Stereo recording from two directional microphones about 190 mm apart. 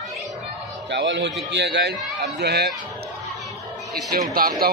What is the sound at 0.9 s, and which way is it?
A man's voice, 70° right (ahead or behind).